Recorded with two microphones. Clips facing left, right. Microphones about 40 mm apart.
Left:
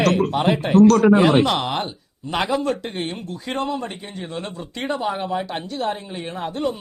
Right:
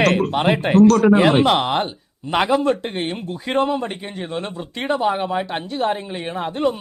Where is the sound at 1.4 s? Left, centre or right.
Right.